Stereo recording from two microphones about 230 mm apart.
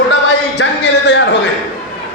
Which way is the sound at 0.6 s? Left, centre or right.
Left.